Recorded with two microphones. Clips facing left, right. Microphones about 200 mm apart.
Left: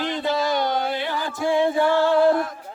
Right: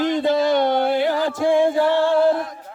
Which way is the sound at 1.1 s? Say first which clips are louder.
Right 5 dB; 50° right (ahead or behind).